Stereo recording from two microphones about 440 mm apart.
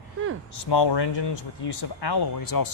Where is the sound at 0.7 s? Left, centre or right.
Left.